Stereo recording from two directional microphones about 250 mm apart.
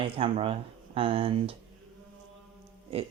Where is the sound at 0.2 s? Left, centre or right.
Right.